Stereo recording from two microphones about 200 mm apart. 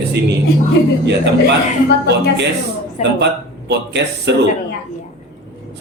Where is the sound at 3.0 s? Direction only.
35° left (ahead or behind).